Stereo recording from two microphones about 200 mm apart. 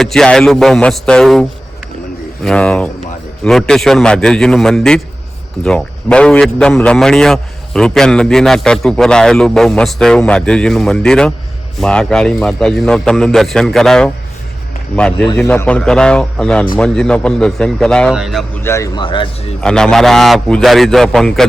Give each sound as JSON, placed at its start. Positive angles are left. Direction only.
{"t": 0.0, "sound": "a man's voice", "side_deg": 0}
{"t": 18.6, "sound": "speech", "side_deg": 15}
{"t": 19.6, "sound": "a man's voice", "side_deg": 5}